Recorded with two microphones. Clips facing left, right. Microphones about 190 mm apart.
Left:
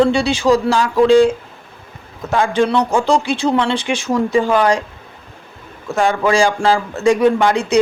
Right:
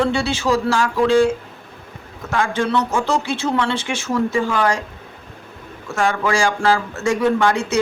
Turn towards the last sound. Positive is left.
turn(degrees=15)  # may be behind; listen again after turning